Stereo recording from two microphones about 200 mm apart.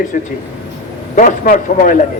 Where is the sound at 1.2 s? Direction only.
40° left (ahead or behind).